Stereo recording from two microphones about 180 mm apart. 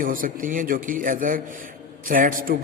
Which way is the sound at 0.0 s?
50° right (ahead or behind).